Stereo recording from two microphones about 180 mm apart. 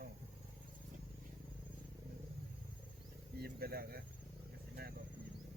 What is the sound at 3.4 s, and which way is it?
Bird, 60° right (ahead or behind).